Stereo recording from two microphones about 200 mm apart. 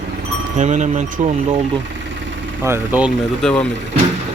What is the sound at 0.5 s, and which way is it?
Speech, 35° right (ahead or behind).